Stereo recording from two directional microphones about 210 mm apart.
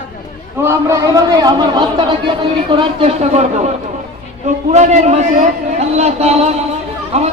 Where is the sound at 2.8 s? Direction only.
30° right (ahead or behind).